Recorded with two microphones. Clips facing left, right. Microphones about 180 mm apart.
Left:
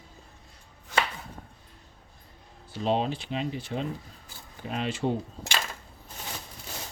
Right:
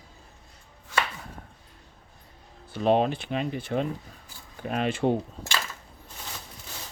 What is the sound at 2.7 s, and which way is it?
Speech, 55° right (ahead or behind).